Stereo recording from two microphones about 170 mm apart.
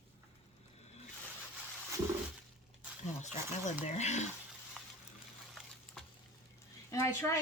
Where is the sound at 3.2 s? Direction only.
45° left (ahead or behind).